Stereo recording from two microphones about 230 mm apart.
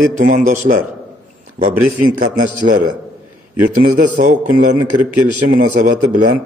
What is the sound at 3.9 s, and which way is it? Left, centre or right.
Speech, right.